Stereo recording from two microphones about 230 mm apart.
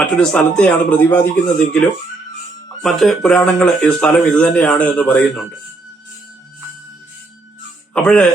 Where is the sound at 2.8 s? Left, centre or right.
Centre.